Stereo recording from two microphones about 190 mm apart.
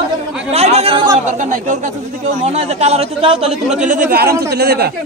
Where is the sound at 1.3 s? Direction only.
40° right (ahead or behind).